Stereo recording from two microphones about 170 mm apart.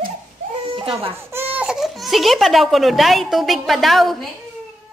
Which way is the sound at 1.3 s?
15° right (ahead or behind).